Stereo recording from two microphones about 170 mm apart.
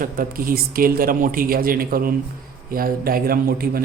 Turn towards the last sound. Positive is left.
turn(degrees=-60)  # may be behind; listen again after turning